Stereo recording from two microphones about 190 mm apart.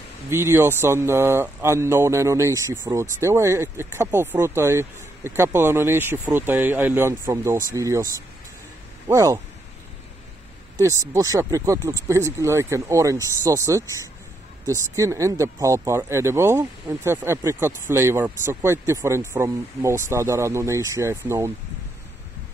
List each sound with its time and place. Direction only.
0.3 s speech: 15° right (ahead or behind)
10.8 s speech: 15° right (ahead or behind)